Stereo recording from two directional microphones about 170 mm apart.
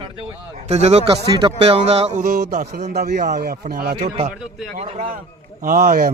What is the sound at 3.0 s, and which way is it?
Speech, 70° right (ahead or behind).